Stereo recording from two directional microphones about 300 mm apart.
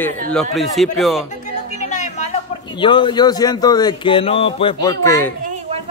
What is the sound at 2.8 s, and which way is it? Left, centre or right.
Speech, centre.